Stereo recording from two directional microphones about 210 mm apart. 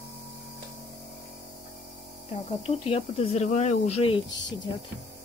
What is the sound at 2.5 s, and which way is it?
Speech, 25° left (ahead or behind).